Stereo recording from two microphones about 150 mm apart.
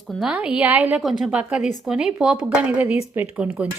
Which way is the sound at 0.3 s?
10° right (ahead or behind).